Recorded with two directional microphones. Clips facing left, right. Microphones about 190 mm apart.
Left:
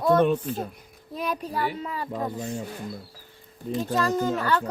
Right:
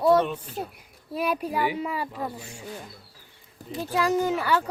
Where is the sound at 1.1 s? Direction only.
10° right (ahead or behind).